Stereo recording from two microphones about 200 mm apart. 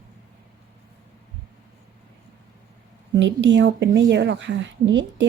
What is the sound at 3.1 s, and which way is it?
A woman's voice, 65° right (ahead or behind).